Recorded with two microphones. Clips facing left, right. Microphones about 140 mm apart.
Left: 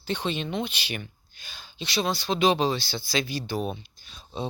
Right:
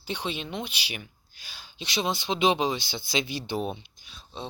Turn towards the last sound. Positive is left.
turn(degrees=5)  # may be behind; listen again after turning